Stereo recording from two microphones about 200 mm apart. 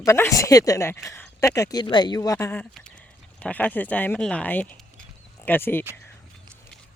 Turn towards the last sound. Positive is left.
turn(degrees=10)  # may be behind; listen again after turning